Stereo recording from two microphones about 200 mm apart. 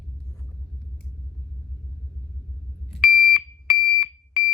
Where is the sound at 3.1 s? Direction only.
Centre (ahead or behind).